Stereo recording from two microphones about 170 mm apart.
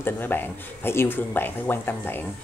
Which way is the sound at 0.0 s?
10° left (ahead or behind).